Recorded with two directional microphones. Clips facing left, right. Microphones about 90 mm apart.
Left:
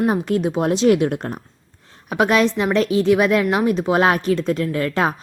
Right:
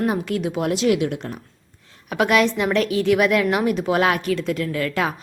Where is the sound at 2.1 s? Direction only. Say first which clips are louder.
Left 1 dB; 30° left (ahead or behind).